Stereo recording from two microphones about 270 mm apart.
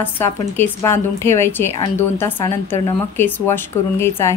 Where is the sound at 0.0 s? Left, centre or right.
Centre.